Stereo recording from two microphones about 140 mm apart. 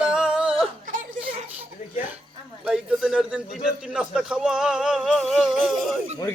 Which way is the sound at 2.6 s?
5° right (ahead or behind).